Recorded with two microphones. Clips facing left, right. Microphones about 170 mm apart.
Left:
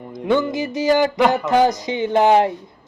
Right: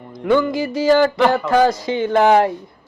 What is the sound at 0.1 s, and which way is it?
A man's voice, 20° left (ahead or behind).